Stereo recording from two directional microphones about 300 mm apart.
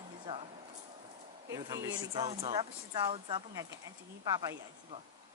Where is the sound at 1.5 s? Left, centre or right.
Centre.